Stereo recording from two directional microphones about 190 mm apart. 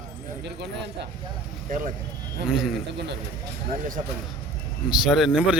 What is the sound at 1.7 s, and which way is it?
Speech, 45° right (ahead or behind).